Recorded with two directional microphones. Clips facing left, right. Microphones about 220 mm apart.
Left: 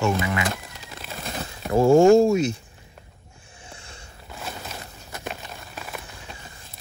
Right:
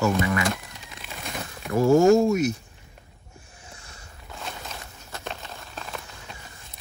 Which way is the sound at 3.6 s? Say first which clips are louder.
Left 5 dB; 30° left (ahead or behind).